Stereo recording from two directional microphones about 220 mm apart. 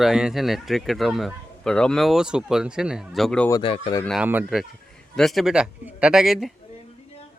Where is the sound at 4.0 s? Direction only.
Centre (ahead or behind).